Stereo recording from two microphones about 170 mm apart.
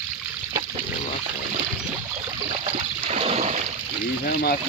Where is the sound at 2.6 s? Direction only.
40° right (ahead or behind).